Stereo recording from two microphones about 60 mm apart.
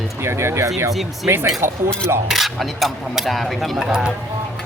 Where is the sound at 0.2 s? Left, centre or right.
Right.